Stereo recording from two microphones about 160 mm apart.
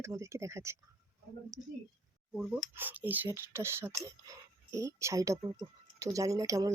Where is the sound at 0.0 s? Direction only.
20° right (ahead or behind).